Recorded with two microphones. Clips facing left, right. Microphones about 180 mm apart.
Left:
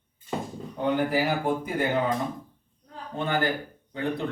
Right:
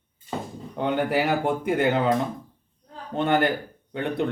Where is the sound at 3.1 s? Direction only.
70° right (ahead or behind).